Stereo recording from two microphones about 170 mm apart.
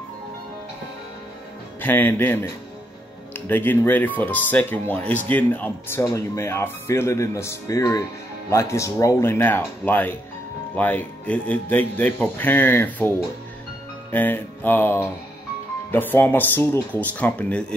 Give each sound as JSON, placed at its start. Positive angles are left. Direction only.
{"t": 1.8, "sound": "speech", "side_deg": 10}
{"t": 14.1, "sound": "speech", "side_deg": 10}